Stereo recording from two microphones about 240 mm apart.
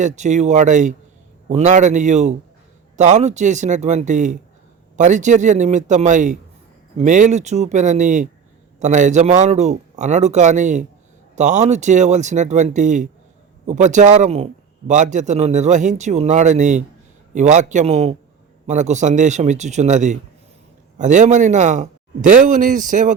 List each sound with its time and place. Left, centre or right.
0.0 s a man's voice: right